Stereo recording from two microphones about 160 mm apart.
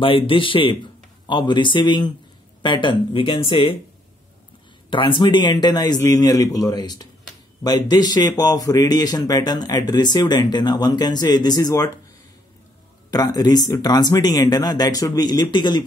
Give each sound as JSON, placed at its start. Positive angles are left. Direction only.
{"t": 0.0, "sound": "speech", "side_deg": 35}
{"t": 4.8, "sound": "speech", "side_deg": 30}
{"t": 13.1, "sound": "speech", "side_deg": 25}